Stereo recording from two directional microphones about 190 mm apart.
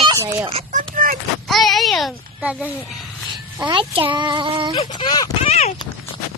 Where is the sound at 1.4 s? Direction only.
Centre (ahead or behind).